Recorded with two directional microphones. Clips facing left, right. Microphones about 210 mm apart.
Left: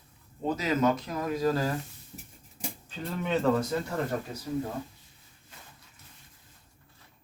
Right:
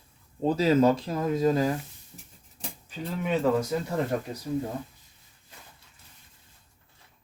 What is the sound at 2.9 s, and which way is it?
Speech, 10° right (ahead or behind).